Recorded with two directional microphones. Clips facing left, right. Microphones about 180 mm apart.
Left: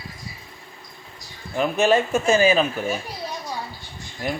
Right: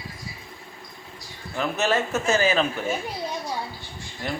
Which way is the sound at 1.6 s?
15° left (ahead or behind).